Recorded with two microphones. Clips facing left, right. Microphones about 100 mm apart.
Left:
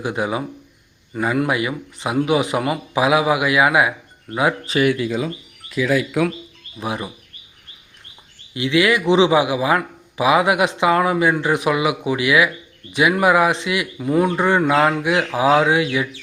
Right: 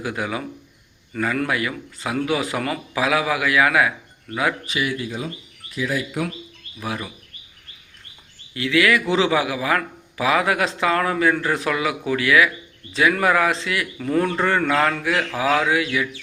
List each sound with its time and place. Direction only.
0.0 s speech: 20° left (ahead or behind)
4.8 s speech: 80° left
6.7 s speech: 20° left (ahead or behind)
8.5 s speech: 20° left (ahead or behind)